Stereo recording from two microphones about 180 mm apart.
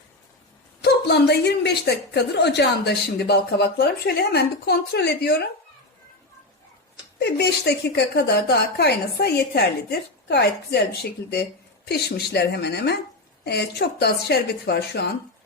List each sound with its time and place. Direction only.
0.9 s a woman's voice: 65° left (ahead or behind)
7.2 s a woman's voice: 65° left (ahead or behind)